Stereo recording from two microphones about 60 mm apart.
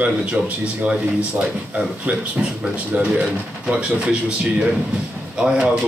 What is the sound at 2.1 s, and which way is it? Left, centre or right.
Speech, centre.